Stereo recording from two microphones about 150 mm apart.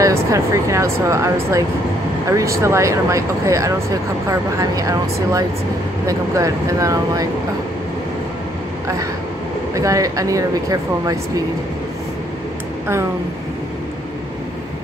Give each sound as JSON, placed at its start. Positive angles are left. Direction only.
{"t": 0.0, "sound": "speech", "side_deg": -20}
{"t": 9.8, "sound": "speech", "side_deg": -20}